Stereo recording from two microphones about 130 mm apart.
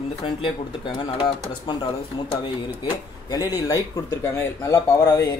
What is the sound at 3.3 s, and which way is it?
Speech, 30° left (ahead or behind).